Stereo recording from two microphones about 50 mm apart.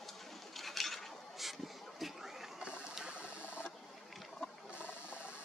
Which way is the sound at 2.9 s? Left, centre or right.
Centre.